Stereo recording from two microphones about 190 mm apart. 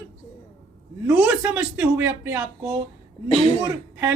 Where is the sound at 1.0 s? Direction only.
5° right (ahead or behind).